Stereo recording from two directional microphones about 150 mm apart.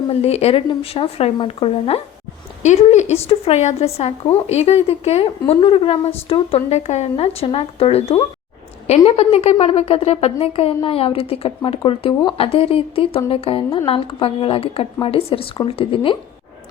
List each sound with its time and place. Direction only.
0.1 s speech: 45° left (ahead or behind)